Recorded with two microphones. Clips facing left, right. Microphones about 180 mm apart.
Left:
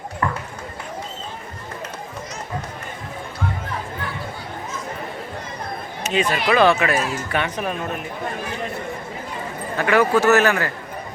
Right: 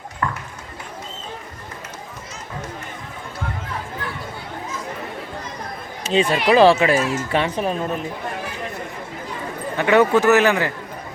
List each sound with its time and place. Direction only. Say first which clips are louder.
6.0 s speech: right 3 dB; 30° right (ahead or behind)
9.7 s speech: right 2 dB; 20° right (ahead or behind)